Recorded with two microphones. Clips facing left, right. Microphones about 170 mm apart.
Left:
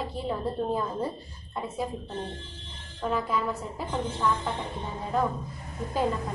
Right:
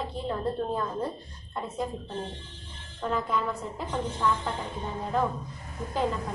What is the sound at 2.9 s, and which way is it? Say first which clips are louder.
A woman's voice: left 1 dB; 5° left (ahead or behind).